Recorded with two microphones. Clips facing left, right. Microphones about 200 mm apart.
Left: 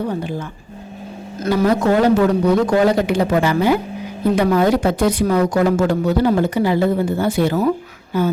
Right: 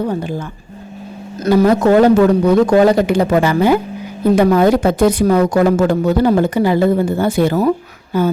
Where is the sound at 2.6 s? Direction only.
45° right (ahead or behind).